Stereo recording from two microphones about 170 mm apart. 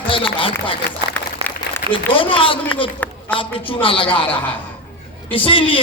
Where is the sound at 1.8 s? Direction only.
60° left (ahead or behind).